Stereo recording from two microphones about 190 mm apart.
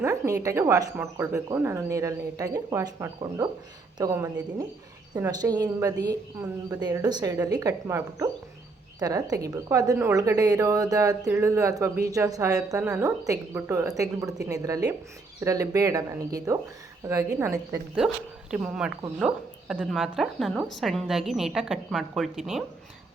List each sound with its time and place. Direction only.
0.0 s a woman's voice: 15° right (ahead or behind)